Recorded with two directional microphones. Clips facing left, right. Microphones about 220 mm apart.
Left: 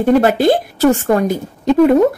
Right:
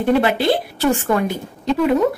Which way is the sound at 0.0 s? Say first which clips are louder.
Left 5 dB; 45° left (ahead or behind).